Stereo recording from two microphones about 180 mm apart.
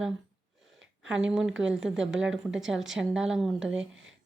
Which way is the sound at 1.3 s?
5° right (ahead or behind).